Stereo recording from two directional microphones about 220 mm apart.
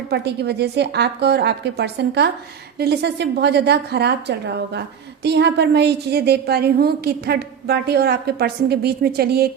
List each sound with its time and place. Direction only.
0.1 s a woman's voice: 50° right (ahead or behind)